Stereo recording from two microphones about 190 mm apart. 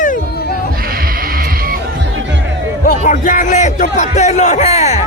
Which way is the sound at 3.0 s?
45° left (ahead or behind).